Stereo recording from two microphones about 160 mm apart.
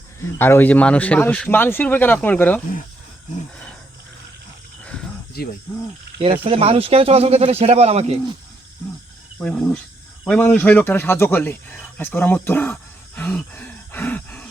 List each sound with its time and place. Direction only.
0.3 s speech: 15° left (ahead or behind)
5.4 s speech: 70° left (ahead or behind)
6.1 s speech: 35° right (ahead or behind)
9.4 s speech: 5° left (ahead or behind)